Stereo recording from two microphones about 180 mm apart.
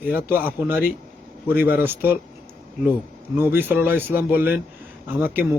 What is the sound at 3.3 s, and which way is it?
Speech, 10° right (ahead or behind).